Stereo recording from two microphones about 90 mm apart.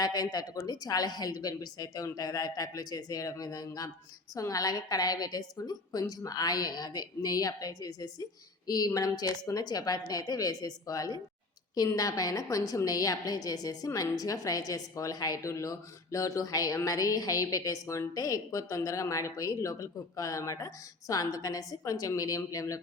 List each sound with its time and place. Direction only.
0.0 s a woman's voice: 50° left (ahead or behind)